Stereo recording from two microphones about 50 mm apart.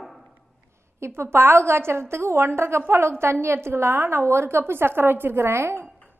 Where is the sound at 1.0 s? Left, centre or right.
Right.